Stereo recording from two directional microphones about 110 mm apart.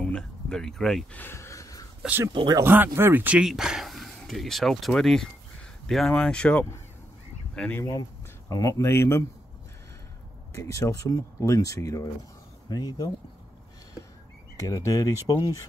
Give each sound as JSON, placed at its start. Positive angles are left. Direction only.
{"t": 0.0, "sound": "speech", "side_deg": 10}
{"t": 1.1, "sound": "a sound", "side_deg": 20}
{"t": 2.3, "sound": "speech", "side_deg": -40}
{"t": 2.6, "sound": "speech", "side_deg": -20}
{"t": 7.8, "sound": "speech", "side_deg": 30}
{"t": 10.5, "sound": "speech", "side_deg": 25}
{"t": 14.6, "sound": "speech", "side_deg": 30}